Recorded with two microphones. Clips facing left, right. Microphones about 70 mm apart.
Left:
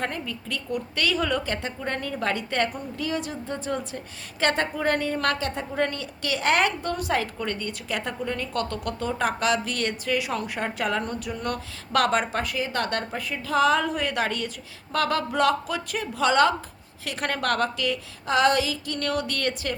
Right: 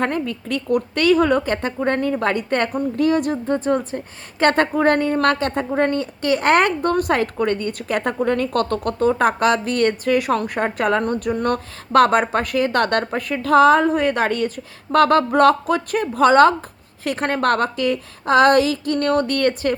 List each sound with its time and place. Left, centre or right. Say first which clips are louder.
0.0 s speech: right 8 dB; right